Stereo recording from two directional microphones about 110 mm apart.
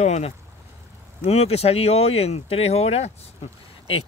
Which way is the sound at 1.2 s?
70° left (ahead or behind).